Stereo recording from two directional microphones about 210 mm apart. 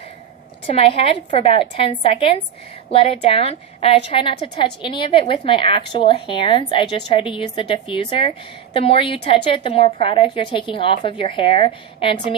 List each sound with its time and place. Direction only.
0.7 s a woman's voice: 25° left (ahead or behind)